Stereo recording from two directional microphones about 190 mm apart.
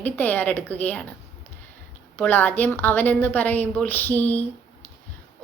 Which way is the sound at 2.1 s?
10° left (ahead or behind).